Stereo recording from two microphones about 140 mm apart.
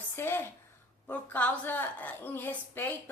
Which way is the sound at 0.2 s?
15° left (ahead or behind).